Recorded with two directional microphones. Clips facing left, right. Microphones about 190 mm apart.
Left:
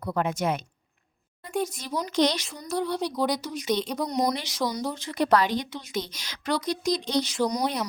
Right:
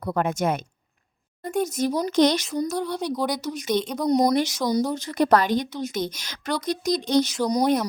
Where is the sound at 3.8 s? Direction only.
5° left (ahead or behind).